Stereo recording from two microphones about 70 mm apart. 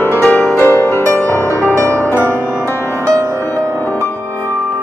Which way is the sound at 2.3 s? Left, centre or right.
Right.